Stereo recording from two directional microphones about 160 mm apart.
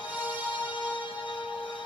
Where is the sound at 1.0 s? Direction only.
30° left (ahead or behind).